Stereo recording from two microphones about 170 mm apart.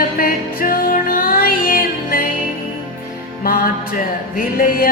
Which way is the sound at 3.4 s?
60° left (ahead or behind).